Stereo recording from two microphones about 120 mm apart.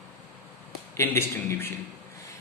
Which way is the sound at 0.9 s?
20° left (ahead or behind).